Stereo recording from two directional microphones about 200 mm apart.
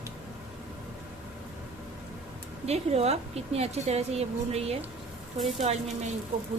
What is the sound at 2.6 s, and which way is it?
A woman's voice, 30° right (ahead or behind).